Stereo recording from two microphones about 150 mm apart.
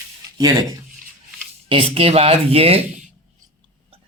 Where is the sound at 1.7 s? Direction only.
35° right (ahead or behind).